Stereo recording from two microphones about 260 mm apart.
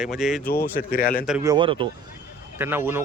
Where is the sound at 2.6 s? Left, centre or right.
Centre.